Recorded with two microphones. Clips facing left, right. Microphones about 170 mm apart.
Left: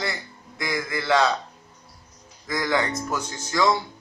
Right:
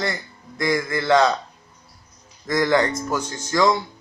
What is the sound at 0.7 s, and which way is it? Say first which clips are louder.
Speech: right 5 dB; 45° right (ahead or behind).